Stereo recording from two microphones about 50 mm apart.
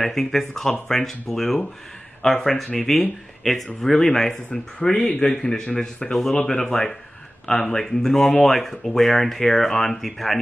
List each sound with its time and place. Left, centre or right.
0.0 s speech: centre